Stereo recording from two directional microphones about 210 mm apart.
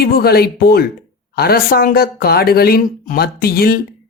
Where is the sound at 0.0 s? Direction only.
45° left (ahead or behind).